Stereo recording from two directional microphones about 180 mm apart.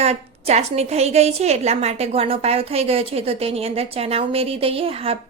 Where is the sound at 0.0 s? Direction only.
35° right (ahead or behind).